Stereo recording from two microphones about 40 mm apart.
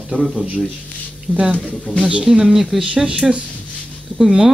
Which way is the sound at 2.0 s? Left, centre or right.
Right.